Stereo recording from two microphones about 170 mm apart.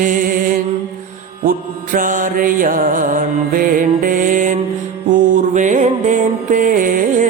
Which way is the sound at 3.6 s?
50° right (ahead or behind).